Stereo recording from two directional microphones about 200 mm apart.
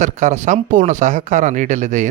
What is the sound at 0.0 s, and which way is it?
Speech, 40° right (ahead or behind).